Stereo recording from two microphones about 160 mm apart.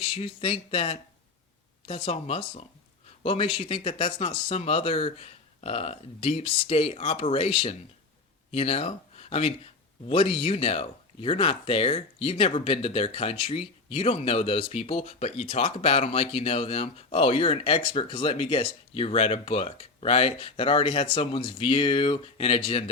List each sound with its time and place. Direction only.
0.0 s speech: 35° left (ahead or behind)